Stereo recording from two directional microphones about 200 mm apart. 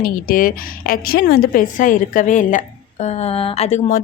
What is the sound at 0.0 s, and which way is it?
Speech, 45° left (ahead or behind).